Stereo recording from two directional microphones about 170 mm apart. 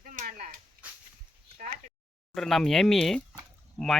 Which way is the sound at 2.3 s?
Centre (ahead or behind).